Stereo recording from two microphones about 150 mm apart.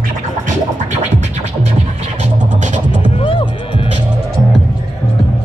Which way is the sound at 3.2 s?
35° left (ahead or behind).